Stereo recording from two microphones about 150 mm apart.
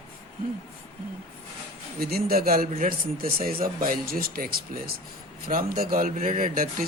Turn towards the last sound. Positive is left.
turn(degrees=-70)  # may be behind; listen again after turning